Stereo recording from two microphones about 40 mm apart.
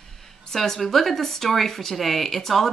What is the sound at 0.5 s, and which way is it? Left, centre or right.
Speech, centre.